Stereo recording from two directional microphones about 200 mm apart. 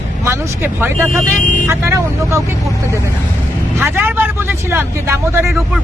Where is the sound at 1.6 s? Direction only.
15° right (ahead or behind).